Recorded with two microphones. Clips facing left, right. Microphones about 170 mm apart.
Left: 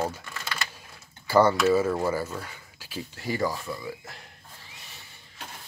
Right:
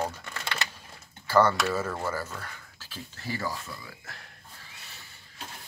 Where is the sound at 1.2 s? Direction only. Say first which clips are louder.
Left 3 dB; 10° left (ahead or behind).